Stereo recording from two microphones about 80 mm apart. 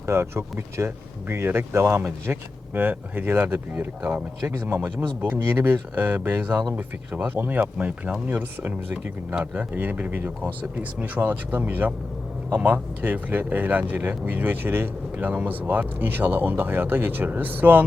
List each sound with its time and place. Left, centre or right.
0.0 s speech: right
4.4 s speech: right